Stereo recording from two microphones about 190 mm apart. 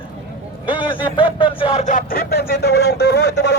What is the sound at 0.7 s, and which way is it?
Speech, 25° left (ahead or behind).